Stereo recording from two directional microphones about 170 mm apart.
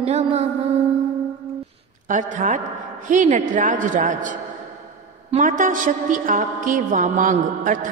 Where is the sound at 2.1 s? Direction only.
50° right (ahead or behind).